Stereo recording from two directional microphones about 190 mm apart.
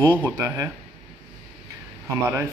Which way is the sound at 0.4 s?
15° right (ahead or behind).